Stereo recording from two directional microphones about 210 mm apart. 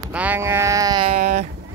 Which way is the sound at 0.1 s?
5° right (ahead or behind).